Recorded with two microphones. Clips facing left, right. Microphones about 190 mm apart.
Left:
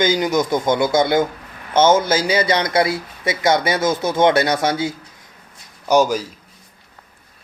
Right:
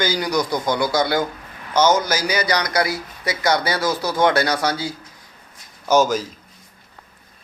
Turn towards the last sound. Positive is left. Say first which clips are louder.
# left 1 dB
turn(degrees=10)  # may be behind; listen again after turning